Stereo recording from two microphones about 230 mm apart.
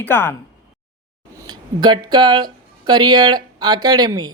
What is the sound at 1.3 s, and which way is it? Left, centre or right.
Speech, centre.